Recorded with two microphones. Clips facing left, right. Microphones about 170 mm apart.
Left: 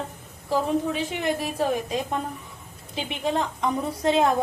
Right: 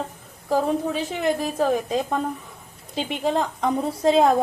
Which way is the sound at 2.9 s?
30° right (ahead or behind).